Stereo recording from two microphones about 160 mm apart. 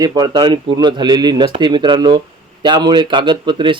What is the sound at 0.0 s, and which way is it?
Speech, 25° right (ahead or behind).